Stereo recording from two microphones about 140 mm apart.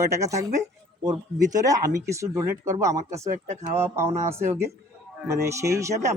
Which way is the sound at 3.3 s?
55° right (ahead or behind).